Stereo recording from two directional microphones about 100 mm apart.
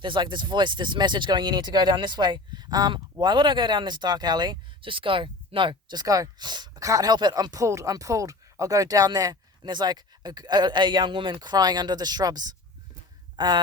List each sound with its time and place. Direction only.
0.0 s speech: 55° right (ahead or behind)